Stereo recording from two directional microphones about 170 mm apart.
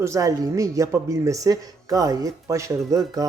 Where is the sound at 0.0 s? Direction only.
20° right (ahead or behind).